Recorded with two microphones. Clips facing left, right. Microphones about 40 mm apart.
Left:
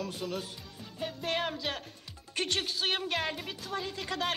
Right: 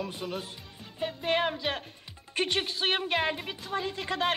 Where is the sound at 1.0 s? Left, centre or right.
Centre.